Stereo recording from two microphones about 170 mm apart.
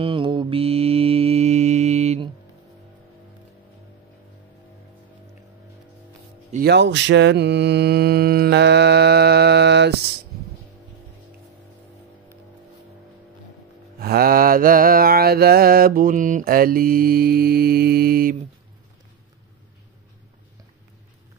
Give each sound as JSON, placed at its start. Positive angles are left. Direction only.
{"t": 0.0, "sound": "mantra", "side_deg": -30}
{"t": 6.6, "sound": "mantra", "side_deg": -85}
{"t": 13.9, "sound": "mantra", "side_deg": -65}